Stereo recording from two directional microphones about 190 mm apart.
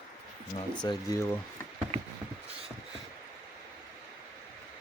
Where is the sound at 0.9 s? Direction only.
15° left (ahead or behind).